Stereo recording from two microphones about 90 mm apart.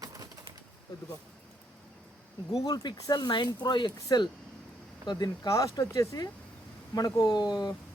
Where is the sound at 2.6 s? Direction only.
45° left (ahead or behind).